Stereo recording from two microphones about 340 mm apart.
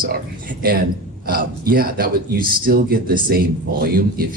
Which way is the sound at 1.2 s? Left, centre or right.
Right.